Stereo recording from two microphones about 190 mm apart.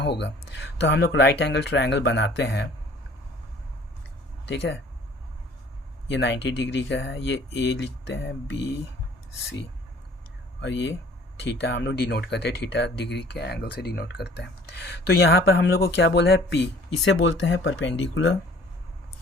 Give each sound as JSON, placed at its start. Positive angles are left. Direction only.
{"t": 0.0, "sound": "speech", "side_deg": 65}
{"t": 4.4, "sound": "speech", "side_deg": 70}
{"t": 6.1, "sound": "speech", "side_deg": 65}
{"t": 10.6, "sound": "speech", "side_deg": 70}